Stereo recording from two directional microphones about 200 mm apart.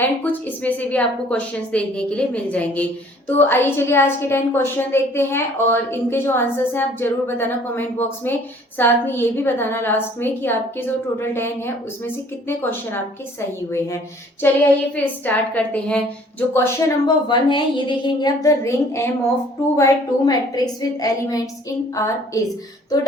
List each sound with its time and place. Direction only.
0.0 s a woman's voice: 10° left (ahead or behind)
14.4 s a woman's voice: 10° left (ahead or behind)